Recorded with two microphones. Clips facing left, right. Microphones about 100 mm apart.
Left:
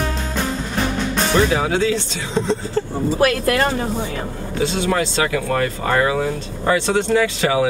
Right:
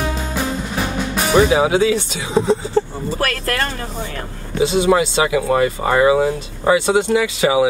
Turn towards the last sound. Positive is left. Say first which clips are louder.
# right 2 dB
turn(degrees=-10)  # may be behind; listen again after turning